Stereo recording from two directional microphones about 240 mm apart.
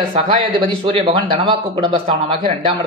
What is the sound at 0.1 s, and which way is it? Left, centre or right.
A man's voice, right.